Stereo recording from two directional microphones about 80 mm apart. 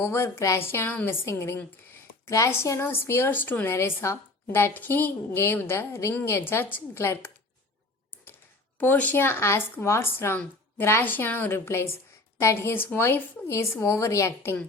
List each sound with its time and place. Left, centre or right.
0.0 s a woman's voice: left
2.2 s a woman's voice: left
8.8 s a woman's voice: left